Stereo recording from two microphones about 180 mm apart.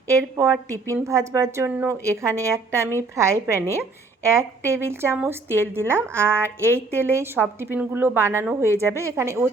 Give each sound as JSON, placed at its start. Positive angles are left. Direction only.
{"t": 0.1, "sound": "a woman's voice", "side_deg": -15}